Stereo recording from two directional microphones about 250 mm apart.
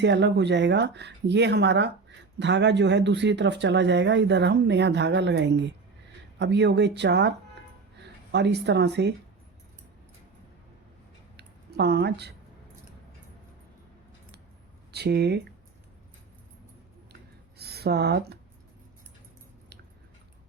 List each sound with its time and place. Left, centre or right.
0.0 s speech: right
11.3 s a sound: right
14.9 s speech: right
17.6 s speech: right